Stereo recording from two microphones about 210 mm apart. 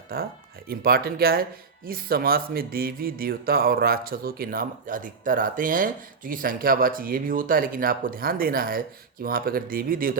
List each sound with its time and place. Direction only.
0.1 s speech: 45° right (ahead or behind)